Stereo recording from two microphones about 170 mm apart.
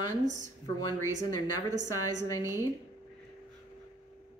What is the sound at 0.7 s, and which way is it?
Speech, 20° left (ahead or behind).